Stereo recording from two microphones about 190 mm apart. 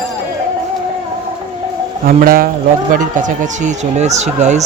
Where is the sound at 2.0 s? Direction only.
50° right (ahead or behind).